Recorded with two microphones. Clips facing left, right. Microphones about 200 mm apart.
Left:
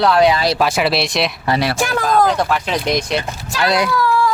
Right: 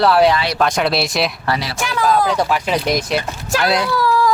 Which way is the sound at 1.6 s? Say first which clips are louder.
Left 4 dB; 50° left (ahead or behind).